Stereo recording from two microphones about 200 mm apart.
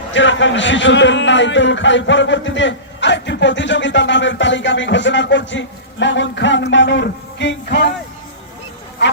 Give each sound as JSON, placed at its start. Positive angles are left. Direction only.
{"t": 0.1, "sound": "a man's voice", "side_deg": 65}